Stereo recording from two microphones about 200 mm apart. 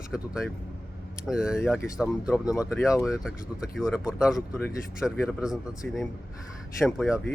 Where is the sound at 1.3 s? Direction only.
5° right (ahead or behind).